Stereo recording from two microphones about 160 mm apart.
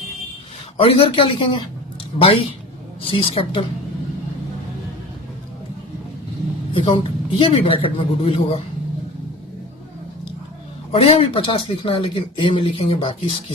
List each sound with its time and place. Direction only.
0.8 s speech: 35° left (ahead or behind)
6.7 s speech: 35° left (ahead or behind)
10.9 s speech: 35° left (ahead or behind)